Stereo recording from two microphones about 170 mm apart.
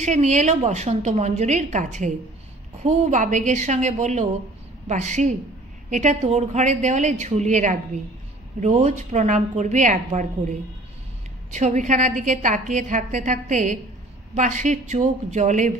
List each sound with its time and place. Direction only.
0.0 s a woman's voice: 45° right (ahead or behind)